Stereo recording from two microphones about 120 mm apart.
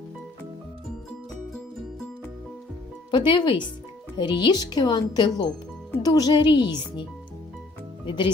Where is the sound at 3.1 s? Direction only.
40° left (ahead or behind).